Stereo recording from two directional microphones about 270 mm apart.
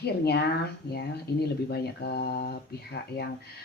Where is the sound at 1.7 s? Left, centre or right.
Left.